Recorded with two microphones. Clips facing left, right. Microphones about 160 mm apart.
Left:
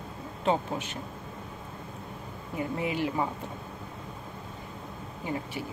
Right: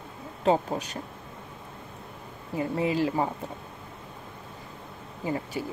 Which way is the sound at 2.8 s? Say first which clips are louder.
Right 4 dB; 35° right (ahead or behind).